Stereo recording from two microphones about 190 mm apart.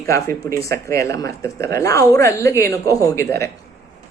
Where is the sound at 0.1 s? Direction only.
15° left (ahead or behind).